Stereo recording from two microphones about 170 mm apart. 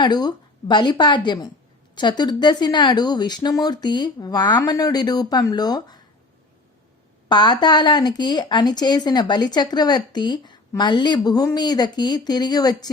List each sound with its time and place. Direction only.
0.0 s speech: 25° left (ahead or behind)
7.3 s speech: 25° left (ahead or behind)